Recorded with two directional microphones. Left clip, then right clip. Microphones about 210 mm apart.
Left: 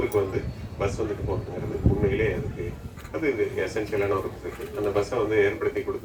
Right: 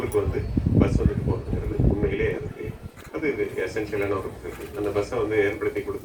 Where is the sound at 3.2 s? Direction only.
45° left (ahead or behind).